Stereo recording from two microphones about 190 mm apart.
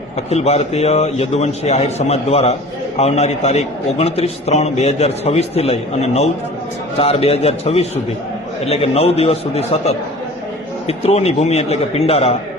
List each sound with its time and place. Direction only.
0.3 s a man's voice: 35° left (ahead or behind)